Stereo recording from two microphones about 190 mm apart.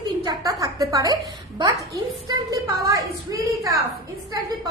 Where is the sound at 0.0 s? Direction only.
20° right (ahead or behind).